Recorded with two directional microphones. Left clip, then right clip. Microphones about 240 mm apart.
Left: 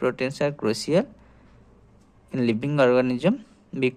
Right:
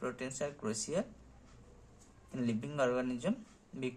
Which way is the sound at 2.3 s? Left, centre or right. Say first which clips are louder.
Left 14 dB; left.